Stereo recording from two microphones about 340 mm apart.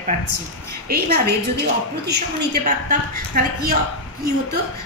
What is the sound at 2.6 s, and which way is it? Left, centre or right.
A woman's voice, right.